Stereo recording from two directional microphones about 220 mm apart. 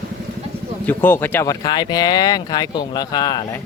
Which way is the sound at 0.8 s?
10° left (ahead or behind).